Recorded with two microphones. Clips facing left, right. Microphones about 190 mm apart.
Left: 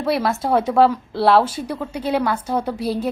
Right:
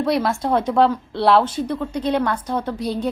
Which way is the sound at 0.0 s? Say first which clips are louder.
Right 1 dB; 5° left (ahead or behind).